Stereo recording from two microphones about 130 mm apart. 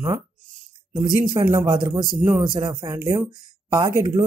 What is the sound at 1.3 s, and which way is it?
Speech, 25° right (ahead or behind).